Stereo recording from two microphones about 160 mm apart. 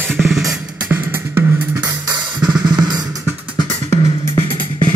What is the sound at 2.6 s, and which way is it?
Music, 25° right (ahead or behind).